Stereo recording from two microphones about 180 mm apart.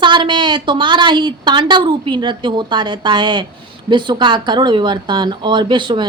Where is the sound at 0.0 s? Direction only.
25° right (ahead or behind).